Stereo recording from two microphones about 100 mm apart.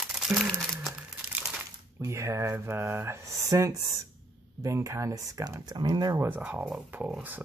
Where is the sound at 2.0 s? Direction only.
30° right (ahead or behind).